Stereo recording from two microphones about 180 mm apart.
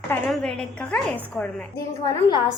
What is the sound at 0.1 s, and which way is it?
Speech, 5° left (ahead or behind).